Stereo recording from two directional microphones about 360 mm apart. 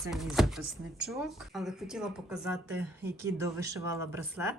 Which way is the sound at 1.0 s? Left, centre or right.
Centre.